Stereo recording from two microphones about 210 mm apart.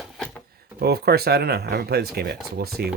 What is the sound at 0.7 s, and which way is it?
Speech, 50° right (ahead or behind).